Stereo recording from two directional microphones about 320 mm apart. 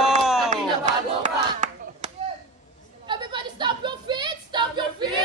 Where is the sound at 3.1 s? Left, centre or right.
Centre.